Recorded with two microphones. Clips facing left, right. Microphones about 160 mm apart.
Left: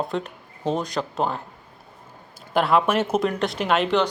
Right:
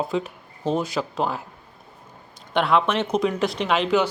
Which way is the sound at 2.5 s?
5° left (ahead or behind).